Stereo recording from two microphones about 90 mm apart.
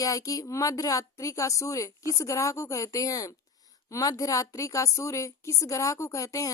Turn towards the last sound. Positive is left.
turn(degrees=40)  # may be behind; listen again after turning